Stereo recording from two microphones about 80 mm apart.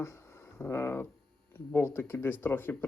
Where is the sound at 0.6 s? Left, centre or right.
Left.